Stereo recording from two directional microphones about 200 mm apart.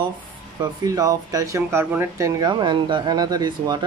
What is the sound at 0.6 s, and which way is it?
Speech, 15° right (ahead or behind).